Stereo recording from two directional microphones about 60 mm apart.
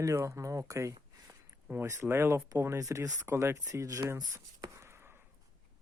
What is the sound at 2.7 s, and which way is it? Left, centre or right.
Speech, right.